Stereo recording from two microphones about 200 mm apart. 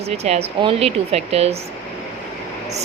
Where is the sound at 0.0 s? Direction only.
30° right (ahead or behind).